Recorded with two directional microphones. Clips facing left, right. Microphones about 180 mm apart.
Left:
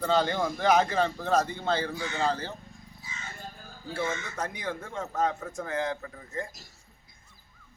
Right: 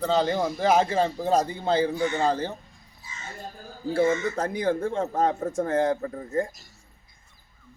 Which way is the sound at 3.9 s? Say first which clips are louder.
Right 10 dB; 30° right (ahead or behind).